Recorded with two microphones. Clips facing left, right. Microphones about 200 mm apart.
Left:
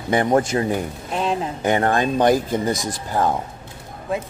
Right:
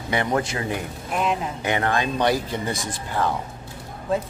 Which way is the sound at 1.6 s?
45° left (ahead or behind).